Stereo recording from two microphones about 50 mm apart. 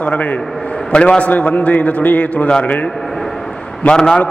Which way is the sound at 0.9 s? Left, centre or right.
Left.